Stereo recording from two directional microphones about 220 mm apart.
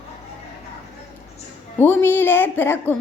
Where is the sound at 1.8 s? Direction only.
10° left (ahead or behind).